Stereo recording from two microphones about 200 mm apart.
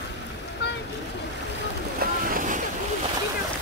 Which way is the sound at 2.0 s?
45° right (ahead or behind).